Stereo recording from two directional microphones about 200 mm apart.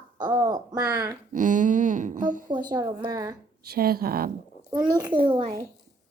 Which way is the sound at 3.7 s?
50° right (ahead or behind).